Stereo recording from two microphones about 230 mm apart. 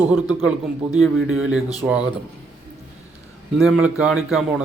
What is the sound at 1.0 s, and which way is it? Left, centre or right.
Speech, right.